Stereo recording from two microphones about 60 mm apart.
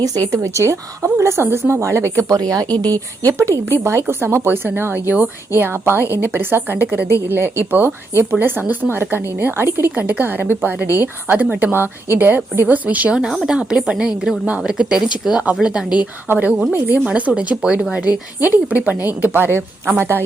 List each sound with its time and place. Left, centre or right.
0.3 s speech: right
2.3 s speech: right
5.1 s speech: right
5.8 s a woman's voice: right
10.0 s a woman's voice: right
13.1 s a woman's voice: centre
17.1 s speech: right
18.4 s a woman's voice: right